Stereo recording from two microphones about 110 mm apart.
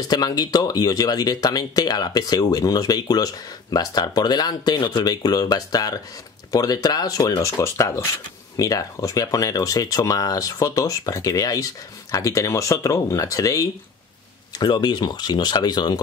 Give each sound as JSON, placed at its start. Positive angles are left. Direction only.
{"t": 0.1, "sound": "speech", "side_deg": 35}
{"t": 14.6, "sound": "speech", "side_deg": 45}